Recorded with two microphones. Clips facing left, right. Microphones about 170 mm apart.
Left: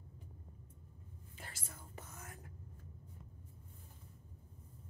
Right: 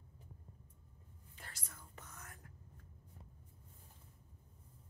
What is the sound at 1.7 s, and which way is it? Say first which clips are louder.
Whispering: left 4 dB; 25° left (ahead or behind).